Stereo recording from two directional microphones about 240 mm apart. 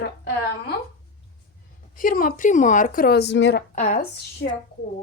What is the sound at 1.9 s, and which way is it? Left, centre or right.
Speech, left.